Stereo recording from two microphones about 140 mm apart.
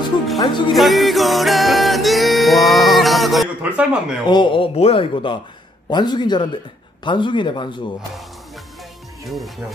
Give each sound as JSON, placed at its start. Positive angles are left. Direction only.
{"t": 0.4, "sound": "speech", "side_deg": 35}
{"t": 0.7, "sound": "music", "side_deg": 0}
{"t": 4.3, "sound": "speech", "side_deg": 35}
{"t": 9.2, "sound": "speech", "side_deg": 0}